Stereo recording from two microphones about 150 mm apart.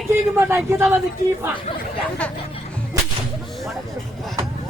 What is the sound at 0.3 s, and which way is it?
Speech, 15° right (ahead or behind).